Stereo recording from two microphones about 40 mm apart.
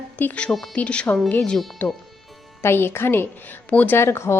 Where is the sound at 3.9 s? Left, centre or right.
Left.